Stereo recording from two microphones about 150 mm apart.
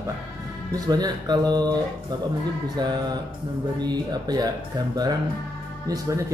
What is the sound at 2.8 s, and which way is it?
Speech, 30° right (ahead or behind).